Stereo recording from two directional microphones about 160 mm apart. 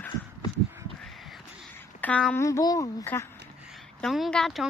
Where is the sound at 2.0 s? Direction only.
5° left (ahead or behind).